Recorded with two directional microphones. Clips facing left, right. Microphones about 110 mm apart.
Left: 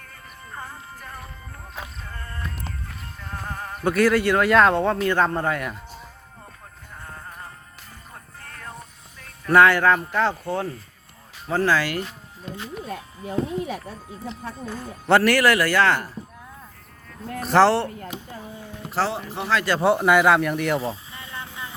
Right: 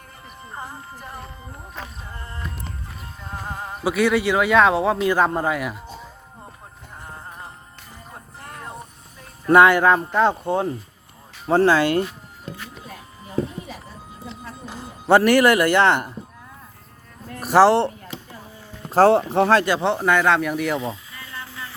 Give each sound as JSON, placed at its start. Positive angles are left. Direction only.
{"t": 0.5, "sound": "speech", "side_deg": -15}
{"t": 2.0, "sound": "music", "side_deg": -20}
{"t": 3.8, "sound": "speech", "side_deg": 0}
{"t": 7.0, "sound": "music", "side_deg": -20}
{"t": 8.4, "sound": "vehicle", "side_deg": -20}
{"t": 9.2, "sound": "speech", "side_deg": -20}
{"t": 14.7, "sound": "speech", "side_deg": -15}
{"t": 17.4, "sound": "speech", "side_deg": -10}
{"t": 18.9, "sound": "speech", "side_deg": -50}
{"t": 19.8, "sound": "speech", "side_deg": 10}
{"t": 20.7, "sound": "a sound", "side_deg": 30}